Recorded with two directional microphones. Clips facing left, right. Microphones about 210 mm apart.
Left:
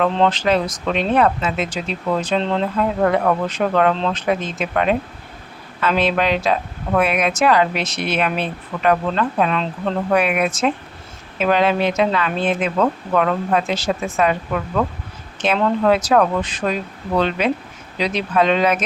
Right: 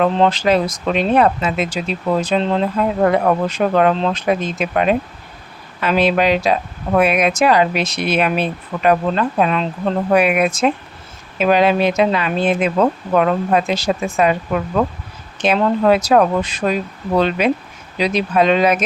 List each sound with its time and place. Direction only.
0.0 s speech: 10° right (ahead or behind)
2.7 s speech: 20° right (ahead or behind)
12.7 s speech: 20° right (ahead or behind)